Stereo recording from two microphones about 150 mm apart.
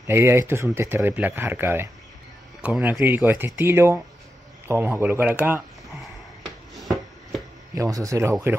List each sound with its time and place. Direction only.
0.0 s speech: 15° right (ahead or behind)
5.9 s a sound: centre (ahead or behind)
7.7 s speech: 20° right (ahead or behind)